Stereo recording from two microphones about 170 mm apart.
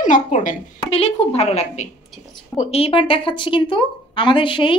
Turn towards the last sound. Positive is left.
turn(degrees=30)  # may be behind; listen again after turning